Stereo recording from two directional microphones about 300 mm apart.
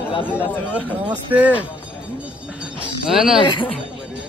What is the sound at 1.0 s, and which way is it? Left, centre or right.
Speech, centre.